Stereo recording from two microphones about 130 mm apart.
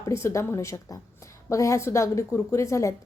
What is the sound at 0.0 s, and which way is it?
A woman's voice, 20° left (ahead or behind).